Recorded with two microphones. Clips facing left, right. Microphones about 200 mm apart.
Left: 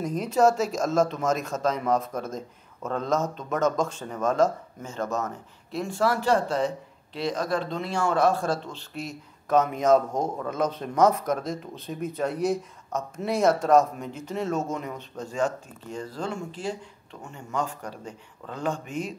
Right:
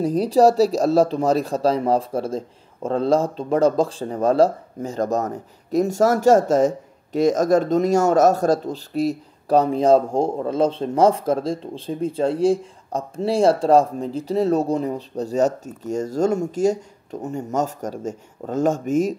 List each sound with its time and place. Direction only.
0.0 s speech: 35° right (ahead or behind)